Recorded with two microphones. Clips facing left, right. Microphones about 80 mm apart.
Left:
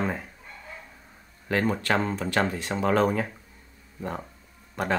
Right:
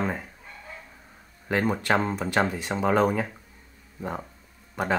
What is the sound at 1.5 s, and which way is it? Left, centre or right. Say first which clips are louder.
Speech: right 1 dB; centre.